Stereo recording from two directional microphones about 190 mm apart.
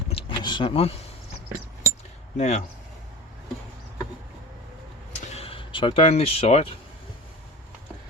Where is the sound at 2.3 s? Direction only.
35° left (ahead or behind).